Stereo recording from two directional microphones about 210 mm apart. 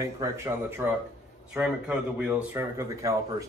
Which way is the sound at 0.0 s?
15° right (ahead or behind).